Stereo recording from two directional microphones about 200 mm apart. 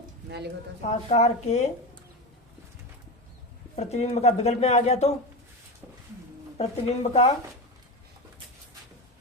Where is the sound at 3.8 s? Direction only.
35° left (ahead or behind).